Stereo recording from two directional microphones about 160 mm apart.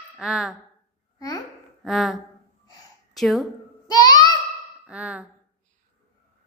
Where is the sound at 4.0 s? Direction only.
25° left (ahead or behind).